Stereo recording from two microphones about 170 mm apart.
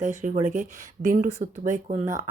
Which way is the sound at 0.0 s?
50° right (ahead or behind).